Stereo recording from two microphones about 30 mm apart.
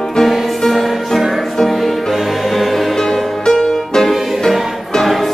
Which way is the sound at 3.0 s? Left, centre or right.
Centre.